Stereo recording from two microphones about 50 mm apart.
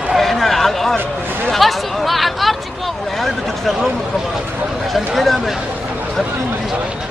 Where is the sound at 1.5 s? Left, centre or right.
Centre.